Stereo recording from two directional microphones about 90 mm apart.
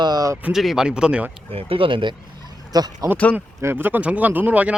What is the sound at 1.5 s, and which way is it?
Speech, 85° right.